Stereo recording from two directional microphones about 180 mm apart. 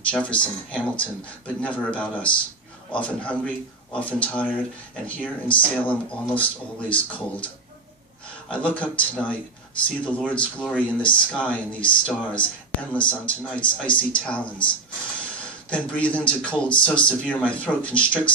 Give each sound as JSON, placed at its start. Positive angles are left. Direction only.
{"t": 0.1, "sound": "speech", "side_deg": 5}
{"t": 15.7, "sound": "speech", "side_deg": 5}